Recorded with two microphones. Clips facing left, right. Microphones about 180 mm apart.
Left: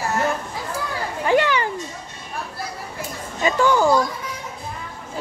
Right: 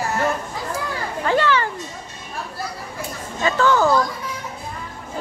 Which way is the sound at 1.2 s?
15° left (ahead or behind).